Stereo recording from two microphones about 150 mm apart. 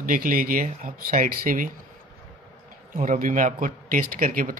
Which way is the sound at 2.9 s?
60° right (ahead or behind).